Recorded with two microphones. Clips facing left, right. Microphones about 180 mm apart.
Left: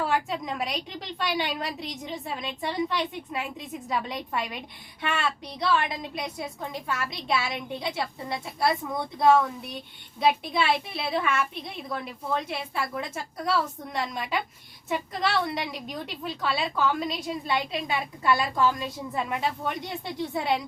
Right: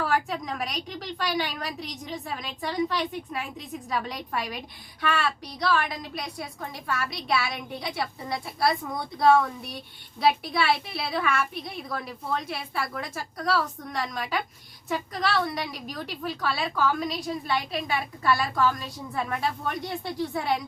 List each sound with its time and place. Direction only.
0.0 s a woman's voice: 25° left (ahead or behind)